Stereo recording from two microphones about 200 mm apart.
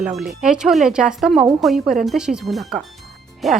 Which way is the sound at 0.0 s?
Centre (ahead or behind).